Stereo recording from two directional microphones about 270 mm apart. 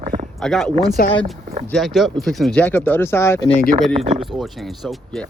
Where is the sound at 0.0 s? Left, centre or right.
Right.